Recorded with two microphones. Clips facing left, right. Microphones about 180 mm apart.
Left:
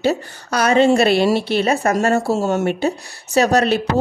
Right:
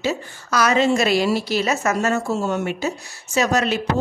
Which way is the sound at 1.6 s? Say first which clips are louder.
Left 4 dB; 35° left (ahead or behind).